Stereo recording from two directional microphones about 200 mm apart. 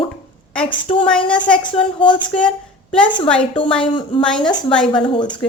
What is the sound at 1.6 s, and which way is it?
Speech, 25° left (ahead or behind).